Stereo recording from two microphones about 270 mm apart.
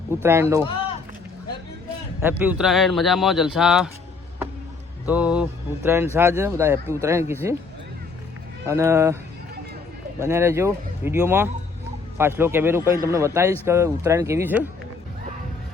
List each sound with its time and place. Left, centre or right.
0.2 s a man's voice: centre
0.6 s a sound: centre
2.4 s speech: centre
5.0 s a man's voice: centre
8.6 s a man's voice: centre
10.2 s a man's voice: centre